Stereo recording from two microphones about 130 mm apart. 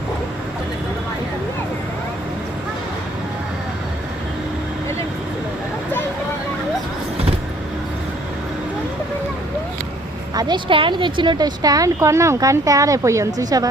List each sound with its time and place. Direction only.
10.3 s speech: 40° right (ahead or behind)